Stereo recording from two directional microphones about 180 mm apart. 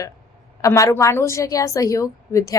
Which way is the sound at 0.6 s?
15° left (ahead or behind).